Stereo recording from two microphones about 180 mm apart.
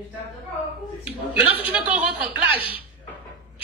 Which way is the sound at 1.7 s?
5° right (ahead or behind).